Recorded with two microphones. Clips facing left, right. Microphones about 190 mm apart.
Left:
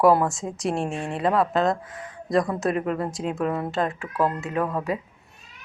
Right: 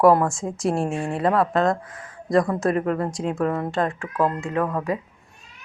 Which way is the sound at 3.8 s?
20° left (ahead or behind).